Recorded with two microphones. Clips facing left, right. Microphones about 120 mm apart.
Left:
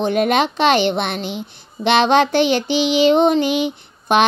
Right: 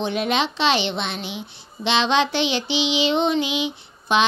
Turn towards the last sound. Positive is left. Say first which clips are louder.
# left 4 dB
turn(degrees=50)  # may be behind; listen again after turning